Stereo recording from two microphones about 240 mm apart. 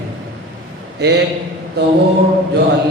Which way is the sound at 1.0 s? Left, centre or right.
Right.